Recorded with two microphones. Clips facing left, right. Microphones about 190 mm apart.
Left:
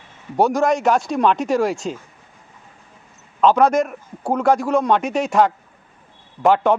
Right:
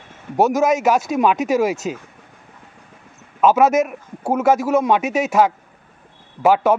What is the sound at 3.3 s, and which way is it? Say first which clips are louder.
A man's voice: right 1 dB; 5° right (ahead or behind).